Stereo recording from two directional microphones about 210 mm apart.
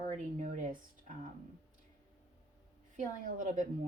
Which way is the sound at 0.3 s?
35° right (ahead or behind).